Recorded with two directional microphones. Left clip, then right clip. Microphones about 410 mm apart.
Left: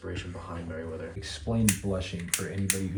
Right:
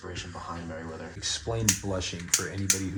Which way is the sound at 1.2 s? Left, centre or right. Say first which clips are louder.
Right 2 dB; centre.